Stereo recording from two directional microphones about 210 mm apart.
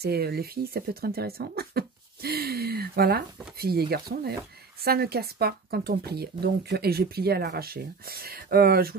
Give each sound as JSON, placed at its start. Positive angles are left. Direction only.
{"t": 0.0, "sound": "speech", "side_deg": -50}